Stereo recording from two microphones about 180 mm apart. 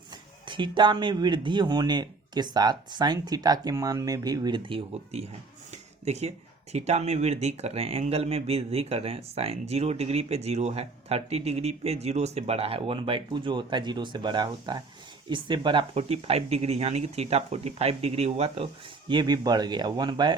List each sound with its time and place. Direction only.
0.1 s speech: 25° right (ahead or behind)